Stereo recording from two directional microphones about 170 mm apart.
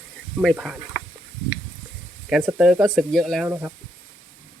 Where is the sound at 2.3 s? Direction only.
5° right (ahead or behind).